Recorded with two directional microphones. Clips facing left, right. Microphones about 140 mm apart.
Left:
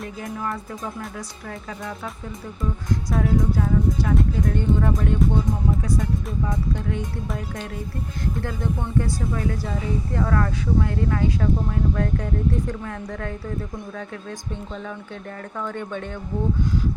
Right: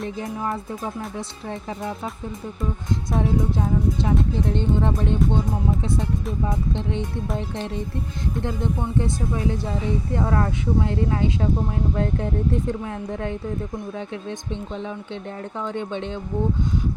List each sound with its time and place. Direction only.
0.2 s speech: 25° right (ahead or behind)
2.9 s speech: 25° right (ahead or behind)